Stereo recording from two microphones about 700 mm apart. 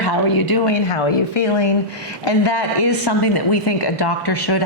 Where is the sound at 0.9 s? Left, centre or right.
Left.